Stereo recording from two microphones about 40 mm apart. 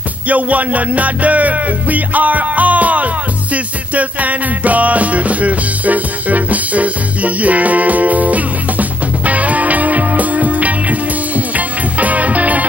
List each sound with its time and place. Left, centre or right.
0.3 s music: right